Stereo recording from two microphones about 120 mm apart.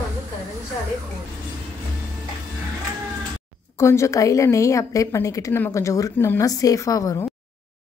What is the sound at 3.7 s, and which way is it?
A woman's voice, 25° left (ahead or behind).